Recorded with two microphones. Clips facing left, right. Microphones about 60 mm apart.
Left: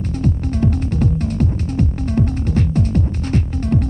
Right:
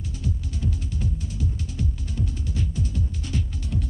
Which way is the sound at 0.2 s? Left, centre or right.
Left.